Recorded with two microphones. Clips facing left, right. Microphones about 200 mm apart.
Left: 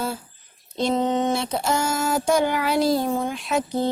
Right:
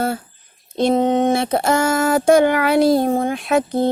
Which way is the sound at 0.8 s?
55° right (ahead or behind).